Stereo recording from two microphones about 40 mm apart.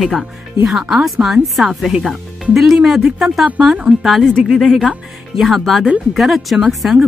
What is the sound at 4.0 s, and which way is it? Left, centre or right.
Speech, centre.